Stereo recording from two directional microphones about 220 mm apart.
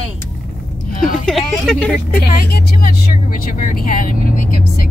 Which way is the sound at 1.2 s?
Centre (ahead or behind).